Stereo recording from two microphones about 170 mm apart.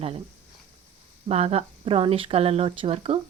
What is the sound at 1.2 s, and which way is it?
Speech, 35° right (ahead or behind).